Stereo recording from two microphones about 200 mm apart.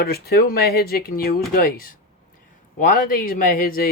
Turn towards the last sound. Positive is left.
turn(degrees=45)  # may be behind; listen again after turning